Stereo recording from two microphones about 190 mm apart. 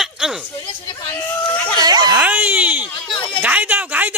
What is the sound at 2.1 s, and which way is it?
Speech, 10° right (ahead or behind).